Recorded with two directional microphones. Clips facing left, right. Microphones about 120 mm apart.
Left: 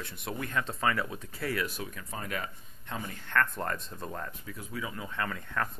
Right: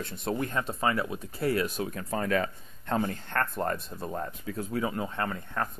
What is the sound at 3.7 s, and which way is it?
Speech, 10° right (ahead or behind).